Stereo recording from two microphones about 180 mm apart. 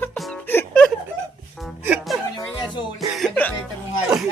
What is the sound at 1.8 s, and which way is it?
Music, 5° right (ahead or behind).